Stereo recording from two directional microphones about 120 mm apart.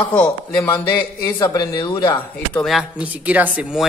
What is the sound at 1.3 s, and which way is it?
Speech, 25° left (ahead or behind).